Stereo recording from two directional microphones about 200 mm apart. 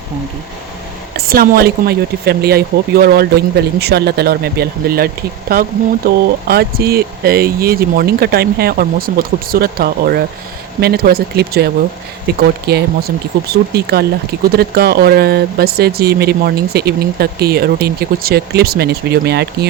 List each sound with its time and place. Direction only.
1.1 s speech: 50° right (ahead or behind)
6.1 s speech: 50° right (ahead or behind)